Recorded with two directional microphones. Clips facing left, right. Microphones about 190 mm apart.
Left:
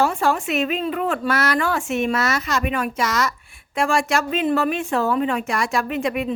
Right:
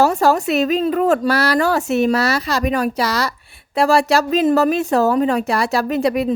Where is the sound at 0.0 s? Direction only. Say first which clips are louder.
Right 5 dB; 40° right (ahead or behind).